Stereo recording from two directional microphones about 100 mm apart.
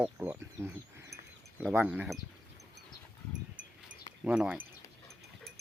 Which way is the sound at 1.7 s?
15° right (ahead or behind).